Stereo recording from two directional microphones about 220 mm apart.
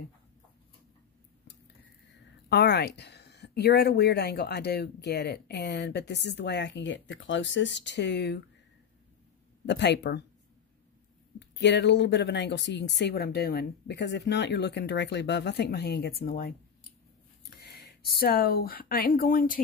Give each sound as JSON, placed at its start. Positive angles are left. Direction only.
{"t": 2.5, "sound": "speech", "side_deg": 50}
{"t": 9.7, "sound": "speech", "side_deg": 50}
{"t": 11.3, "sound": "speech", "side_deg": 50}
{"t": 17.6, "sound": "speech", "side_deg": 45}